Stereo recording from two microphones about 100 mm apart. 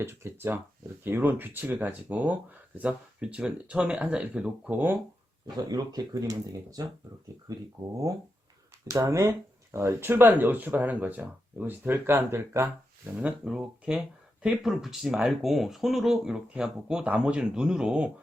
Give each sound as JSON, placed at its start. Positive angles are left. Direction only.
{"t": 0.0, "sound": "speech", "side_deg": -25}
{"t": 5.5, "sound": "speech", "side_deg": -45}
{"t": 13.2, "sound": "speech", "side_deg": -10}